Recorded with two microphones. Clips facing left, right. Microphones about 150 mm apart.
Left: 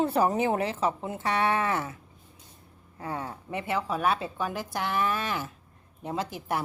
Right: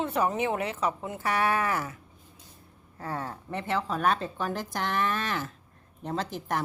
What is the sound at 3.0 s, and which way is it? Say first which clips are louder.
A woman's voice: even; 15° left (ahead or behind).